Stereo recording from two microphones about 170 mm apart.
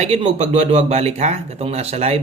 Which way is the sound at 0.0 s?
40° right (ahead or behind).